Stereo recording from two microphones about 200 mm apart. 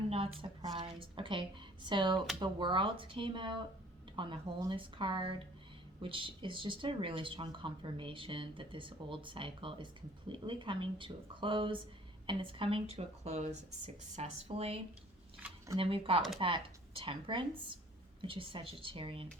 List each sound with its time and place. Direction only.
0.1 s speech: 25° right (ahead or behind)
15.4 s a sound: 10° right (ahead or behind)
15.8 s speech: 25° right (ahead or behind)